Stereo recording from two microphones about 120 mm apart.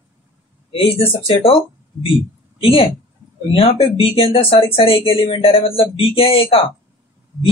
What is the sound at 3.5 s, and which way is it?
Speech, 50° left (ahead or behind).